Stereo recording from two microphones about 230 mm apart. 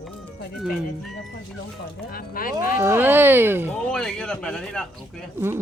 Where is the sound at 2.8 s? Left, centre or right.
Centre.